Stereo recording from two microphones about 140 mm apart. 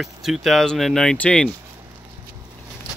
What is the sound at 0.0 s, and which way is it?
Speech, centre (ahead or behind).